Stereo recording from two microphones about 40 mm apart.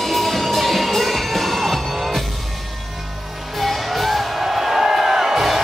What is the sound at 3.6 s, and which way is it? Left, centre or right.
Music, centre.